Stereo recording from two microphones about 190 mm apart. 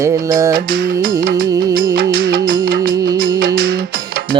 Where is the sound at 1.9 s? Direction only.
50° right (ahead or behind).